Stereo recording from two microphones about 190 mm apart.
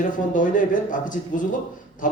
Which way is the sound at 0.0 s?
45° left (ahead or behind).